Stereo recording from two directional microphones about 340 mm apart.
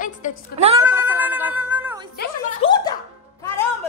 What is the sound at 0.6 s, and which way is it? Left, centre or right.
Speech, centre.